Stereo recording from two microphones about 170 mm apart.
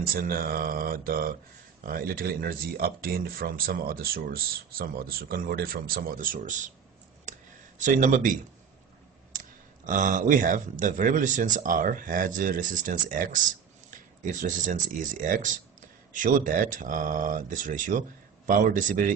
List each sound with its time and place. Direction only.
0.0 s speech: 60° right (ahead or behind)
7.8 s speech: 50° right (ahead or behind)